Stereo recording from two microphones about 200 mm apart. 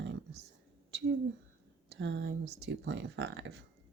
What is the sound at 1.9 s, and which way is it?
Speech, 60° right (ahead or behind).